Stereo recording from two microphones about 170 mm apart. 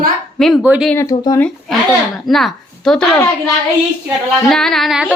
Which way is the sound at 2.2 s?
Centre (ahead or behind).